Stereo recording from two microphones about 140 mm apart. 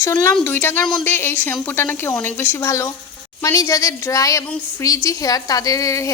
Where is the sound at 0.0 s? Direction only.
20° left (ahead or behind).